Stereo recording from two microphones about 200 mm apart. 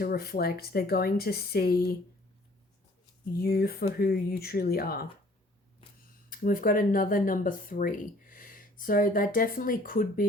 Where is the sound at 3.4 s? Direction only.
50° left (ahead or behind).